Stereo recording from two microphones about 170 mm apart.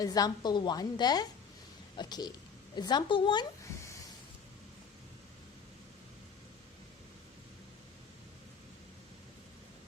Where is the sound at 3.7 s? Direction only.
15° left (ahead or behind).